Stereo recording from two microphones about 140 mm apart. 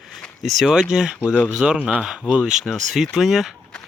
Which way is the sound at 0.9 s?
5° right (ahead or behind).